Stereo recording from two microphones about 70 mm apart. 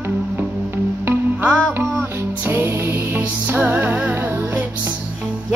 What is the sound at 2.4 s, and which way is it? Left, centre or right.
Music, right.